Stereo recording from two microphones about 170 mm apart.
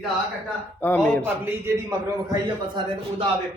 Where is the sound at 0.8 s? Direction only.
10° left (ahead or behind).